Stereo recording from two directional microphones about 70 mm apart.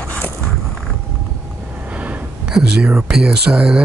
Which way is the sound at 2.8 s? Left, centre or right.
Centre.